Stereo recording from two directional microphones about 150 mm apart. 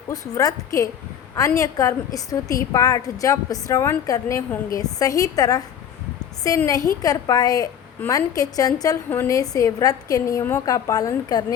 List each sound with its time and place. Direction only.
0.1 s a woman's voice: 25° left (ahead or behind)
6.7 s a woman's voice: 25° left (ahead or behind)